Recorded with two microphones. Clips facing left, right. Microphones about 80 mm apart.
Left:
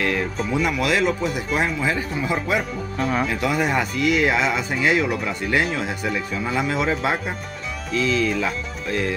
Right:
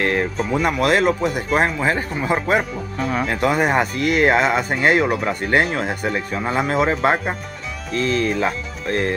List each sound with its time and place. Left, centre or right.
0.0 s music: right
0.5 s speech: right
3.0 s speech: centre
3.3 s speech: right